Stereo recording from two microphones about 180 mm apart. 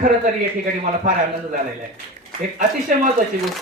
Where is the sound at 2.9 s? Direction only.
45° right (ahead or behind).